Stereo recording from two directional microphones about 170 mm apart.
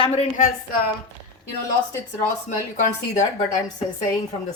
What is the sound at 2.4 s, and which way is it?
Speech, 45° left (ahead or behind).